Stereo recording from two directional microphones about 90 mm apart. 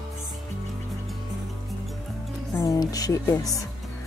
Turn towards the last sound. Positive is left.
turn(degrees=40)  # may be behind; listen again after turning